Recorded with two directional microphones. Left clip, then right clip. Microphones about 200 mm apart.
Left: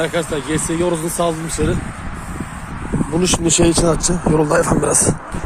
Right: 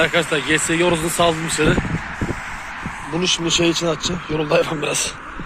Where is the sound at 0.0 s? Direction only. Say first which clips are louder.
Right 2 dB; 10° left (ahead or behind).